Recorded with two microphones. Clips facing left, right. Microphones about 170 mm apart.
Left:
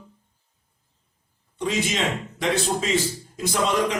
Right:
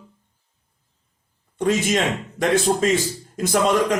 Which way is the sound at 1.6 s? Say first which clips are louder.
Right 5 dB; 50° right (ahead or behind).